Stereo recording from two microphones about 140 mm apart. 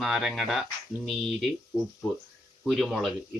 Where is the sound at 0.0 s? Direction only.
Centre (ahead or behind).